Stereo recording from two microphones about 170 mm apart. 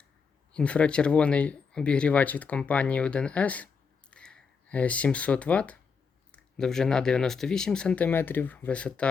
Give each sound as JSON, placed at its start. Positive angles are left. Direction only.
{"t": 0.5, "sound": "speech", "side_deg": 5}